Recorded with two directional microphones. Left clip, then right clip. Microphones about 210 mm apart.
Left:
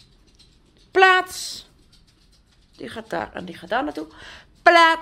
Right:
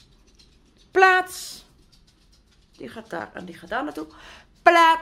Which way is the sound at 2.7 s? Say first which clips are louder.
Left 5 dB; 15° left (ahead or behind).